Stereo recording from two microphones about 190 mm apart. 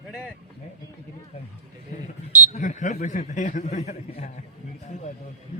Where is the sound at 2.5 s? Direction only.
40° left (ahead or behind).